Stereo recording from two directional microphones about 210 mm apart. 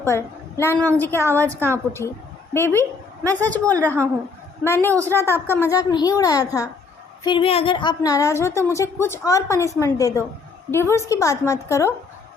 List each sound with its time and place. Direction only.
0.1 s a woman's voice: 15° left (ahead or behind)